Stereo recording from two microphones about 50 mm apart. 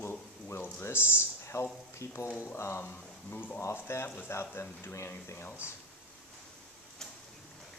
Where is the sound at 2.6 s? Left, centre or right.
Left.